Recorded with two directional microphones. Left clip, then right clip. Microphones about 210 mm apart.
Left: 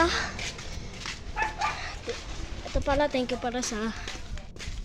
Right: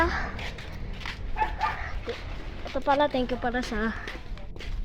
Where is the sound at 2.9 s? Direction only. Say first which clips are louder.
Right 2 dB; centre (ahead or behind).